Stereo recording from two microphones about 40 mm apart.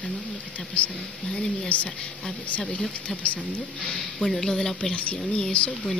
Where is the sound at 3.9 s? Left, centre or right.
Centre.